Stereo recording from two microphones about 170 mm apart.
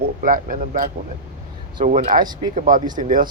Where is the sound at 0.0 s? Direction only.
55° right (ahead or behind).